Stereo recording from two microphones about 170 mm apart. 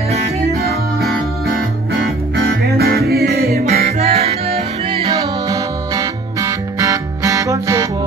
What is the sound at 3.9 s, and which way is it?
Music, 40° right (ahead or behind).